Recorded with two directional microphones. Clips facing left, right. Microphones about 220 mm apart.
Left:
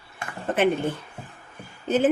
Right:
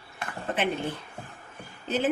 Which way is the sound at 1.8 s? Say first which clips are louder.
Left 6 dB; 50° left (ahead or behind).